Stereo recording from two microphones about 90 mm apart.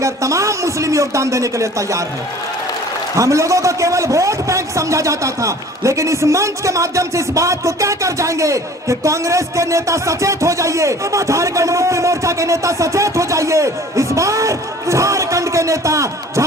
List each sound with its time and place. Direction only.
0.0 s a man's voice: 35° right (ahead or behind)
3.2 s a man's voice: 35° right (ahead or behind)